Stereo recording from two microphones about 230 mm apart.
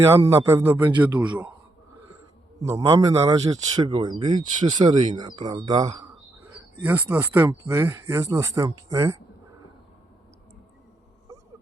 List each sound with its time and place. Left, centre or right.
0.0 s speech: centre
2.6 s speech: centre